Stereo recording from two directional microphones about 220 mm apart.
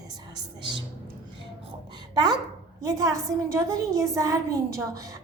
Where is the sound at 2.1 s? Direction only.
20° right (ahead or behind).